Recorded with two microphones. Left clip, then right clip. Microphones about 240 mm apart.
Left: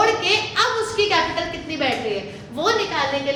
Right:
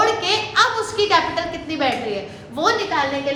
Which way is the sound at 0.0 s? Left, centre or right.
Centre.